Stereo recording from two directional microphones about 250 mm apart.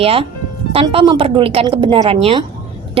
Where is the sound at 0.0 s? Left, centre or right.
Right.